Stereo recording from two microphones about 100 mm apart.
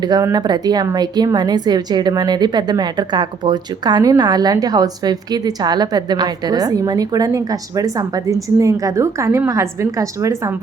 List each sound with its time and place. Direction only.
0.0 s a woman's voice: 40° right (ahead or behind)